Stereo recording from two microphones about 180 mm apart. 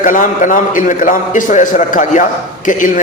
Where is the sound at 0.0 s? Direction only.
45° left (ahead or behind).